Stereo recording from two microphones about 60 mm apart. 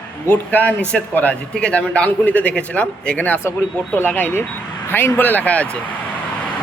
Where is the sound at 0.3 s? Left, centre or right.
Left.